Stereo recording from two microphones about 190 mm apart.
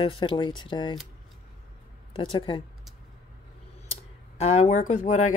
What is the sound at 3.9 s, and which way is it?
Speech, 35° left (ahead or behind).